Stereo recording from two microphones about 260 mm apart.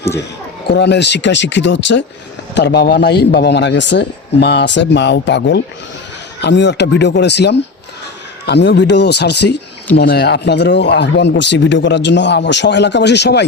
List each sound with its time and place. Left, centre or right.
0.7 s speech: left